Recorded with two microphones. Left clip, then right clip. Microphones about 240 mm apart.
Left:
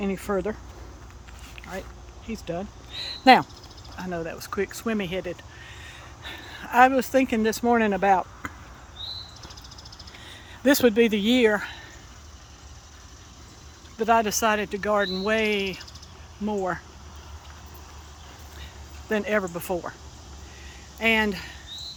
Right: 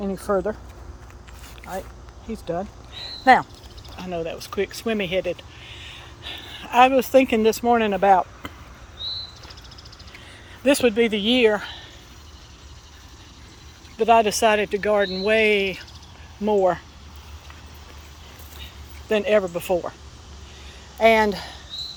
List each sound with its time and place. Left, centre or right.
0.0 s speech: centre
0.3 s speech: left
2.2 s speech: centre
3.9 s speech: centre
5.8 s a sound: centre
7.1 s speech: centre
10.6 s speech: left
13.9 s speech: centre
19.0 s speech: centre
21.0 s speech: centre